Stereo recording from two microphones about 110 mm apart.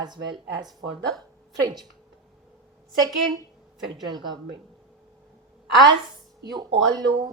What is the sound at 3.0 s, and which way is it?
Speech, 35° right (ahead or behind).